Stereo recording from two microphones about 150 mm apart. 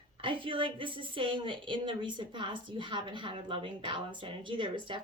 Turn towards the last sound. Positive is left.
turn(degrees=-35)  # may be behind; listen again after turning